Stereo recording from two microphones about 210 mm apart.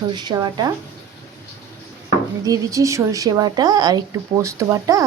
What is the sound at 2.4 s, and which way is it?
A woman's voice, 15° right (ahead or behind).